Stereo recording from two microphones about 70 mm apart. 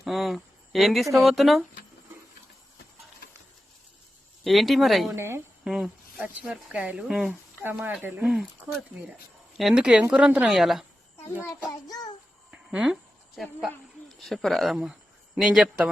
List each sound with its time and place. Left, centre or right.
0.0 s speech: centre
4.4 s speech: centre
5.1 s a woman's voice: right
5.6 s speech: centre
6.7 s speech: centre
7.1 s speech: centre
8.0 s speech: right
9.0 s speech: centre
10.6 s speech: centre
11.7 s child singing: left
12.5 s a sound: centre
13.3 s speech: centre
15.4 s speech: centre